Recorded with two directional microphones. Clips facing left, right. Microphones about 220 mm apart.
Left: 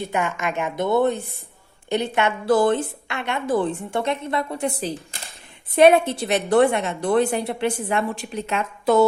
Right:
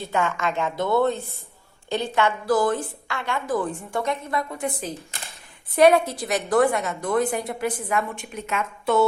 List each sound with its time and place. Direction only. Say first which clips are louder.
0.0 s a woman's voice: even; 15° left (ahead or behind); by 9.0 s 35° left (ahead or behind)